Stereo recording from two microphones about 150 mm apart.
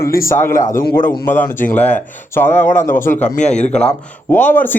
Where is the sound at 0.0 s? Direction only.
75° left (ahead or behind).